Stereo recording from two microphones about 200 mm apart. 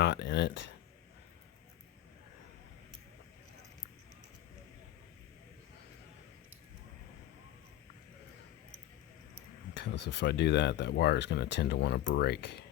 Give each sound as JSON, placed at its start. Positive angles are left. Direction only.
{"t": 0.0, "sound": "speech", "side_deg": 60}
{"t": 9.7, "sound": "speech", "side_deg": 60}